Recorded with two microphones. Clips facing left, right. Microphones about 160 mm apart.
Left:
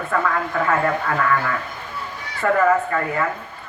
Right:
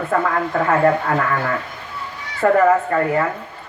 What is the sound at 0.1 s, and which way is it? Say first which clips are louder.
Speech: right 3 dB; 35° right (ahead or behind).